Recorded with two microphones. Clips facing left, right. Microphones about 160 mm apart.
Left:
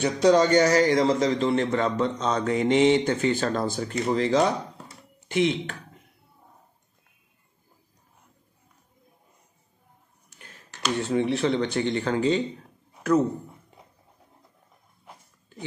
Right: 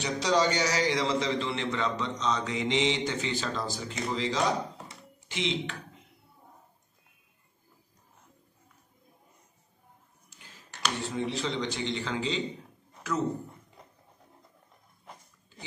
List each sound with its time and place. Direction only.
0.0 s a man's voice: 50° left (ahead or behind)
11.1 s speech: 65° left (ahead or behind)